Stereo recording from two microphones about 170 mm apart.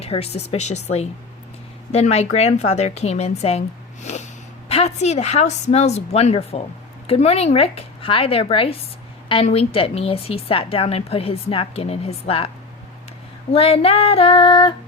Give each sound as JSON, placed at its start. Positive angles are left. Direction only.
{"t": 0.0, "sound": "a woman's voice", "side_deg": 35}
{"t": 13.5, "sound": "a woman's voice", "side_deg": 35}